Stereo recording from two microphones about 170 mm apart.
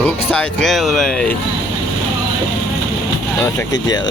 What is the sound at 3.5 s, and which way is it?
Speech, 25° left (ahead or behind).